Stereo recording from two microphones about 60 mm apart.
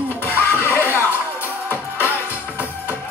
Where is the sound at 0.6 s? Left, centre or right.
Left.